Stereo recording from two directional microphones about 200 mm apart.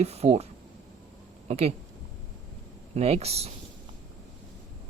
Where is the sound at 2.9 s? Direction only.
30° right (ahead or behind).